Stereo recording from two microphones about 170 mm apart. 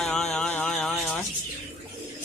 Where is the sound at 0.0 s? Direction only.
Centre (ahead or behind).